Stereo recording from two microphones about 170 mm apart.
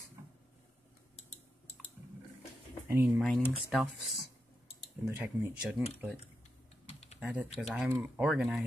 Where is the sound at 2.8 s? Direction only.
10° right (ahead or behind).